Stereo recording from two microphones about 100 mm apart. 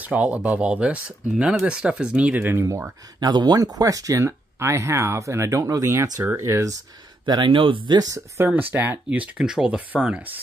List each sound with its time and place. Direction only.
0.0 s speech: 15° right (ahead or behind)
3.2 s speech: 45° right (ahead or behind)
7.2 s speech: 50° right (ahead or behind)
8.4 s speech: 20° right (ahead or behind)